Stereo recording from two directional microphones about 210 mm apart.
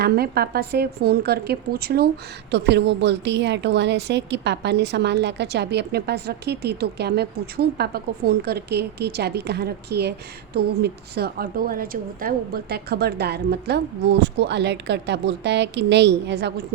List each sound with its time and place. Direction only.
0.0 s a woman's voice: 45° right (ahead or behind)